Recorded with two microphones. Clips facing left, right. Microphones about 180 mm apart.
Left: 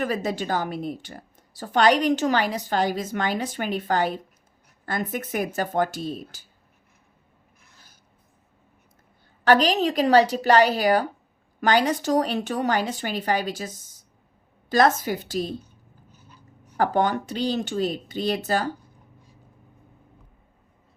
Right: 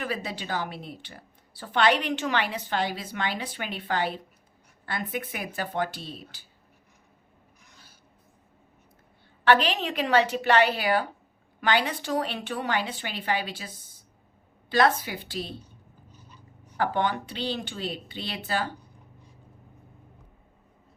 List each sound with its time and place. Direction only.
0.0 s a woman's voice: 45° left (ahead or behind)
9.4 s a woman's voice: 40° left (ahead or behind)
16.7 s a woman's voice: 45° left (ahead or behind)